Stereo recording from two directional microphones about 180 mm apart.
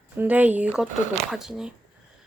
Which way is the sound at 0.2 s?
10° right (ahead or behind).